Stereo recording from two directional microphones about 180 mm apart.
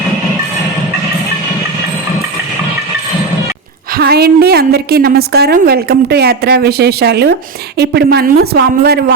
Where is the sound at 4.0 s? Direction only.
60° right (ahead or behind).